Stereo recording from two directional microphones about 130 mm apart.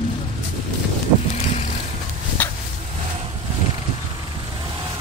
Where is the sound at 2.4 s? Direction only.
15° left (ahead or behind).